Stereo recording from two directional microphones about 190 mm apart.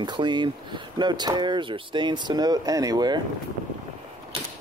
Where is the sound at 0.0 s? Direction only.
25° right (ahead or behind).